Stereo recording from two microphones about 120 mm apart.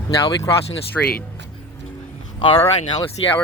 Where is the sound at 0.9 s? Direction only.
10° left (ahead or behind).